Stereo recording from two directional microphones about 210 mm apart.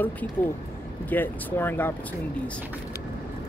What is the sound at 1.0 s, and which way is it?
Speech, 10° left (ahead or behind).